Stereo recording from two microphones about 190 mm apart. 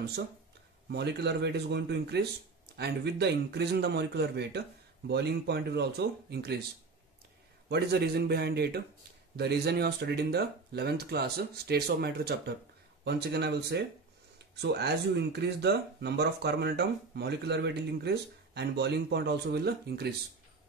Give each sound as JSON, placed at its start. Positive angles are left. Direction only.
{"t": 0.0, "sound": "speech", "side_deg": -60}
{"t": 7.6, "sound": "speech", "side_deg": -60}